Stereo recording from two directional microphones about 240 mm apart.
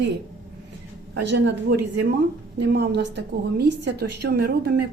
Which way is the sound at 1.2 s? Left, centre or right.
Right.